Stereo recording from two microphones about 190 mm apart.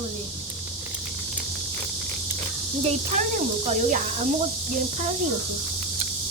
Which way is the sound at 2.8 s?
40° right (ahead or behind).